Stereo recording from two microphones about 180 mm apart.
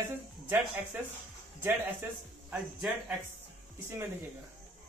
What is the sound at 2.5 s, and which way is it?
Speech, 5° right (ahead or behind).